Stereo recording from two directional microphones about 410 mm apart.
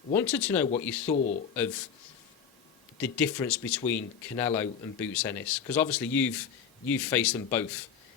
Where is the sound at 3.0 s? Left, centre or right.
Centre.